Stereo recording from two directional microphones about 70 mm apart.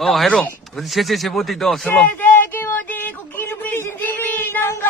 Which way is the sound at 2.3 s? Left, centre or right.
Left.